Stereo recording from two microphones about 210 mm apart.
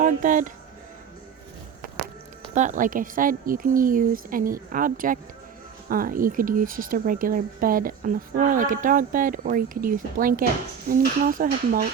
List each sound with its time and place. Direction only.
0.0 s speech: 40° right (ahead or behind)
2.6 s speech: 35° right (ahead or behind)